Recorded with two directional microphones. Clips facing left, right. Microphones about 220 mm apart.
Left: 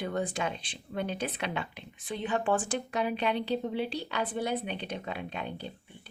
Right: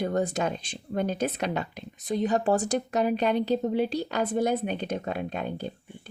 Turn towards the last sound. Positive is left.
turn(degrees=-45)  # may be behind; listen again after turning